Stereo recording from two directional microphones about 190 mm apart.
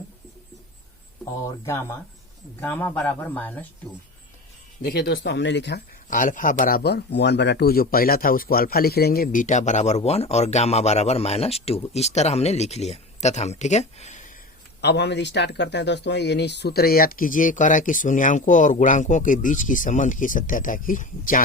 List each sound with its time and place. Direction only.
1.2 s speech: 15° left (ahead or behind)
4.8 s speech: 60° left (ahead or behind)
6.1 s speech: 45° left (ahead or behind)
14.8 s speech: 60° left (ahead or behind); by 21.4 s 45° left (ahead or behind)